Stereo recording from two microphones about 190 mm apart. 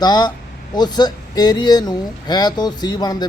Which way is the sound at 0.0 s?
20° left (ahead or behind).